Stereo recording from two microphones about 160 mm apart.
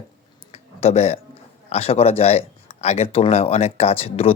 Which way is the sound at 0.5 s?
40° left (ahead or behind).